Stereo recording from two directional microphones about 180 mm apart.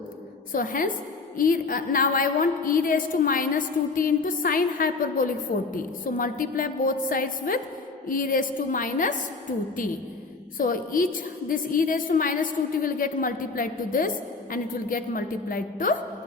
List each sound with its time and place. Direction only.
0.5 s a woman's voice: 50° left (ahead or behind)
10.6 s a woman's voice: 50° left (ahead or behind)